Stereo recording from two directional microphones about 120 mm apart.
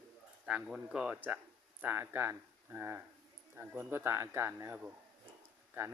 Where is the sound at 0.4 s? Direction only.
5° right (ahead or behind).